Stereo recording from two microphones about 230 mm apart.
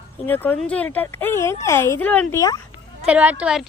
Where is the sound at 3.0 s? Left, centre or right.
Centre.